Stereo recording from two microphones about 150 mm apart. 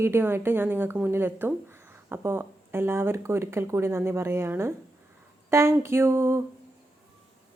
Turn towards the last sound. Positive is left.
turn(degrees=-15)  # may be behind; listen again after turning